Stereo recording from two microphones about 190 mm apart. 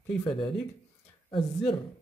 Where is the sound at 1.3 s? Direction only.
25° left (ahead or behind).